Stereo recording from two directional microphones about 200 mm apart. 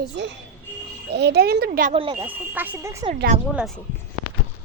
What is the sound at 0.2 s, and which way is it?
A woman's voice, 60° right (ahead or behind).